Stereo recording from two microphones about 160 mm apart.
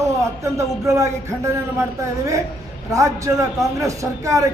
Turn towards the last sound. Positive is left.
turn(degrees=-20)  # may be behind; listen again after turning